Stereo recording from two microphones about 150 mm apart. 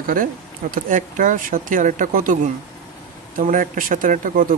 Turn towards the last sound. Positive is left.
turn(degrees=-65)  # may be behind; listen again after turning